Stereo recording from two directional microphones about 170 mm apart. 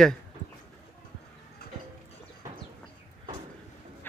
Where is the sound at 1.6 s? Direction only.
65° left (ahead or behind).